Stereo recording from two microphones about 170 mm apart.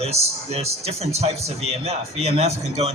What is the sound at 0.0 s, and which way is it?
A man's voice, 35° right (ahead or behind).